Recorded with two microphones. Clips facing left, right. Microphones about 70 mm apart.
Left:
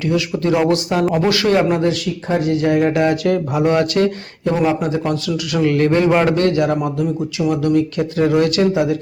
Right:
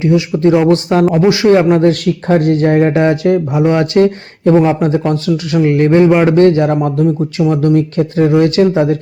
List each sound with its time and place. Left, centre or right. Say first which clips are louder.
0.0 s a man's voice: right 7 dB; right
0.7 s speech: right 6 dB; right
1.0 s a man's voice: right 7 dB; centre
1.9 s a man's voice: right 7 dB; right